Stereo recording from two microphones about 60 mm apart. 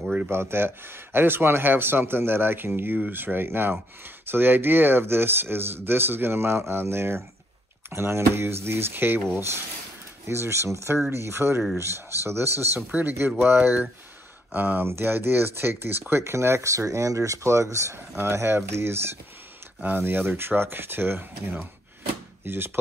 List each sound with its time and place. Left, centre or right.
0.3 s speech: right
9.3 s speech: right
19.8 s speech: right